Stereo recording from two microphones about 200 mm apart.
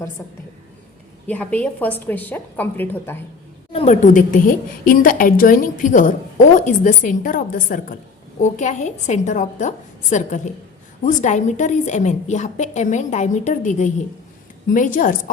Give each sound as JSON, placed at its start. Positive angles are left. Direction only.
{"t": 0.2, "sound": "a woman's voice", "side_deg": 10}
{"t": 3.7, "sound": "a woman's voice", "side_deg": 30}